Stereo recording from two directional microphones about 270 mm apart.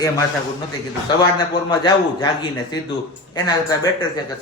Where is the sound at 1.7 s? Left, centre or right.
Centre.